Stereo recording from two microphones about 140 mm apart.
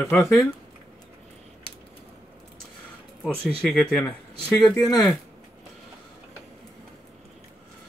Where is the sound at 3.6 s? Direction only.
Centre (ahead or behind).